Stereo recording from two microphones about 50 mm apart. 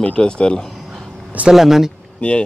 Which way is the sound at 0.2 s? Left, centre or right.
Centre.